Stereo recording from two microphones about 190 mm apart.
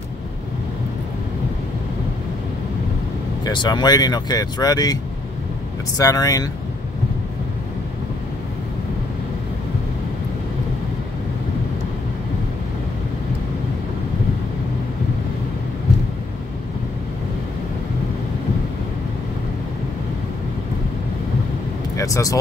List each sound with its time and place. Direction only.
3.4 s speech: 20° left (ahead or behind)
5.9 s speech: 20° left (ahead or behind)
21.9 s speech: 15° left (ahead or behind)